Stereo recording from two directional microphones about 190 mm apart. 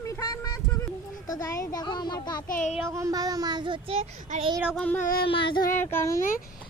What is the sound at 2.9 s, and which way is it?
Child singing, 15° right (ahead or behind).